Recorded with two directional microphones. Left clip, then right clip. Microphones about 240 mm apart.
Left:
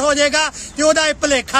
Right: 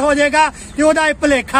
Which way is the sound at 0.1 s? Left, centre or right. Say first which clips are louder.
Right 3 dB; centre.